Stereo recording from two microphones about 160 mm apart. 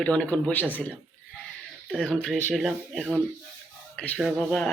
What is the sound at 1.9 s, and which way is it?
Speech, centre (ahead or behind).